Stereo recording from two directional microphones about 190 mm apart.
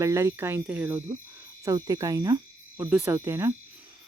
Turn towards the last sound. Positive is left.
turn(degrees=-15)  # may be behind; listen again after turning